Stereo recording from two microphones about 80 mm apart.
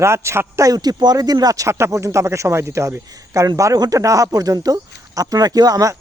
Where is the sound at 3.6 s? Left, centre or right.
Right.